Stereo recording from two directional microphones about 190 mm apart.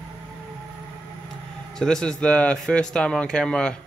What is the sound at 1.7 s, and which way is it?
Speech, 5° left (ahead or behind).